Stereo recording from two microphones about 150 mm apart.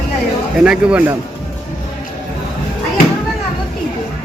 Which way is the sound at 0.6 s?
10° right (ahead or behind).